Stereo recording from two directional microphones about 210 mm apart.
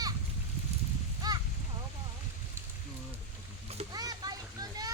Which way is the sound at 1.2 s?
20° right (ahead or behind).